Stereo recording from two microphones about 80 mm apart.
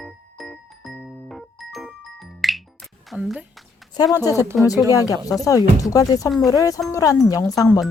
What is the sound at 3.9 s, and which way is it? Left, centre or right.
Speech, left.